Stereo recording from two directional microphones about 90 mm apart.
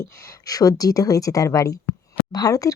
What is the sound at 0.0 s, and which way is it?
A woman's voice, 35° left (ahead or behind).